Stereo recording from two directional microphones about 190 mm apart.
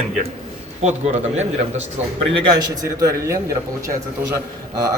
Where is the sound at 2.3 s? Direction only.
25° right (ahead or behind).